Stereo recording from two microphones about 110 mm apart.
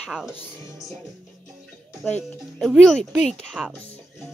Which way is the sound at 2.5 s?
5° left (ahead or behind).